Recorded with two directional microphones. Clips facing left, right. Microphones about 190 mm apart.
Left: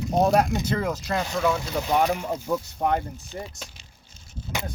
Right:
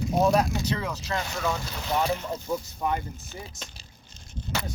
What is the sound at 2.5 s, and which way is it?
Speech, 65° left (ahead or behind).